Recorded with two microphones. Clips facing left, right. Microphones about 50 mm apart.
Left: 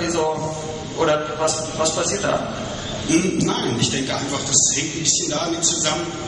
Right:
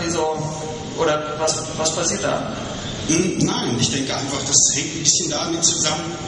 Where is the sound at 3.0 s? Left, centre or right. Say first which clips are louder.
Left 1 dB; centre.